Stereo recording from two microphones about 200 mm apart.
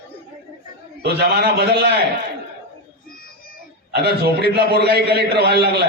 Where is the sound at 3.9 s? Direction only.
55° right (ahead or behind).